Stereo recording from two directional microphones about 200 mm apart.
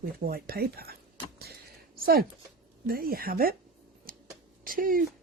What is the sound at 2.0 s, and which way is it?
Speech, 50° right (ahead or behind).